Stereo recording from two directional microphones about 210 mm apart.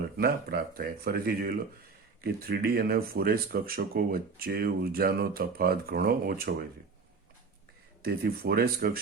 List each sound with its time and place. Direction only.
0.2 s speech: 45° right (ahead or behind)
8.0 s speech: 45° right (ahead or behind)